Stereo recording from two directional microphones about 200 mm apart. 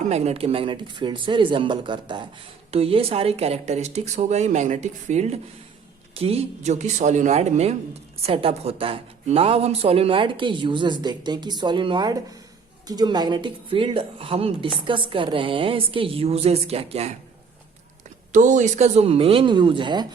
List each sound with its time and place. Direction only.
0.1 s a woman's voice: 30° right (ahead or behind)
18.3 s a woman's voice: 40° right (ahead or behind); by 20.1 s 25° right (ahead or behind)